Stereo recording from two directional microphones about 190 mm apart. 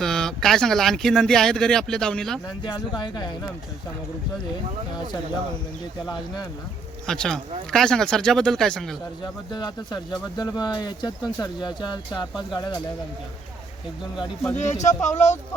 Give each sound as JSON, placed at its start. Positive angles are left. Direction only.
{"t": 0.0, "sound": "speech", "side_deg": 5}
{"t": 2.6, "sound": "speech", "side_deg": 25}
{"t": 6.1, "sound": "speech", "side_deg": 20}
{"t": 7.1, "sound": "speech", "side_deg": 5}
{"t": 9.5, "sound": "speech", "side_deg": 20}
{"t": 14.2, "sound": "speech", "side_deg": 0}
{"t": 14.6, "sound": "speech", "side_deg": 40}